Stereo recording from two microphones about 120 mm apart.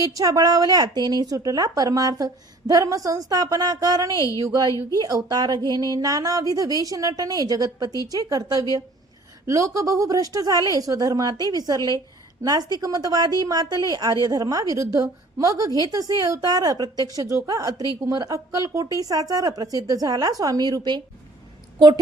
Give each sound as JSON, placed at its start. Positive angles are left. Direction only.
{"t": 0.0, "sound": "a woman's voice", "side_deg": -30}
{"t": 4.1, "sound": "a woman's voice", "side_deg": 25}
{"t": 4.4, "sound": "a woman's voice", "side_deg": -30}